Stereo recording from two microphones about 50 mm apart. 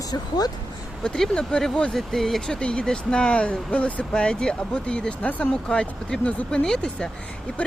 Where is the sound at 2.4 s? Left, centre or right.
Centre.